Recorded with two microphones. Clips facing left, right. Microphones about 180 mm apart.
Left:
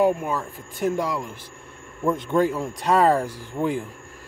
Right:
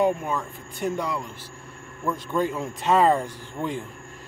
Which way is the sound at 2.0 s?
25° left (ahead or behind).